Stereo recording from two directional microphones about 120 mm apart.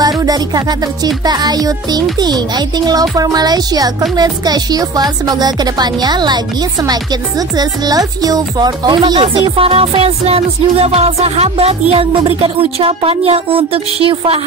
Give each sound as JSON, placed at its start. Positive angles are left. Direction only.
{"t": 0.2, "sound": "speech", "side_deg": -30}
{"t": 11.9, "sound": "music", "side_deg": -50}